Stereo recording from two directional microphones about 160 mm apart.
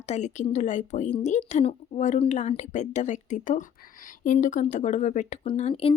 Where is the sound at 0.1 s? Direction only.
45° left (ahead or behind).